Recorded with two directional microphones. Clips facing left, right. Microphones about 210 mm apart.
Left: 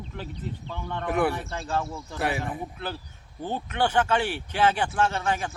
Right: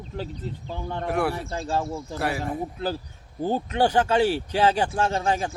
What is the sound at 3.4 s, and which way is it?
Speech, 35° right (ahead or behind).